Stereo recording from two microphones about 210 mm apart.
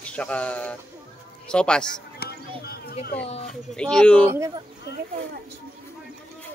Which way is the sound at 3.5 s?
5° left (ahead or behind).